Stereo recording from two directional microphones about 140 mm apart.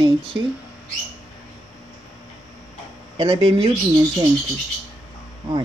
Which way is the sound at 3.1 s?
35° right (ahead or behind).